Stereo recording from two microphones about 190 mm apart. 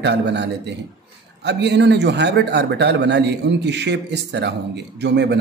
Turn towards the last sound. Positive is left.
turn(degrees=-65)  # may be behind; listen again after turning